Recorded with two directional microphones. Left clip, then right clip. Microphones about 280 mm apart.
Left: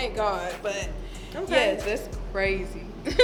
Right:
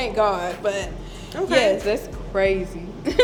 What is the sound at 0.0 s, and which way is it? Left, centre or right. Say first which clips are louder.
A woman's voice: right 6 dB; right.